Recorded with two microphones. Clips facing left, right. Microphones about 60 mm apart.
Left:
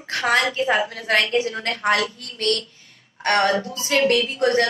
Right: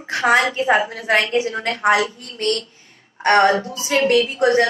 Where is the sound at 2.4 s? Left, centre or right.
Right.